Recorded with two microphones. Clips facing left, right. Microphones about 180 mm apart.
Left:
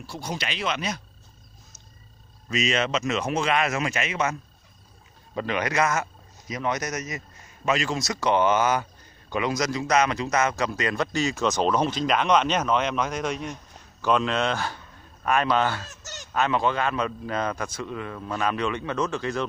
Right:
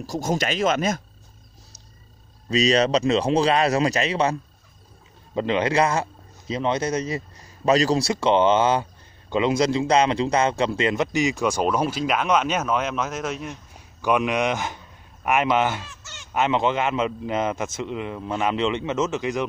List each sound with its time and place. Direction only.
0.0 s speech: 45° right (ahead or behind)
2.5 s speech: 35° right (ahead or behind)
5.3 s a man's voice: 20° right (ahead or behind)
15.9 s honk: 40° left (ahead or behind)
16.3 s a man's voice: 20° right (ahead or behind)